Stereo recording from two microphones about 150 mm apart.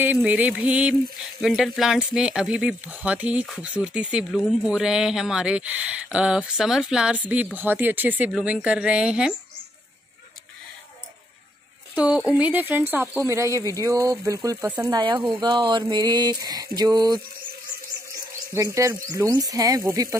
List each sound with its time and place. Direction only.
0.0 s speech: 10° right (ahead or behind)
11.9 s speech: 10° right (ahead or behind); by 17.2 s 25° right (ahead or behind)
18.5 s speech: 20° right (ahead or behind)